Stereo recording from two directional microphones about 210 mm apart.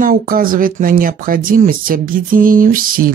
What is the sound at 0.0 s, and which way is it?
Speech, 40° right (ahead or behind).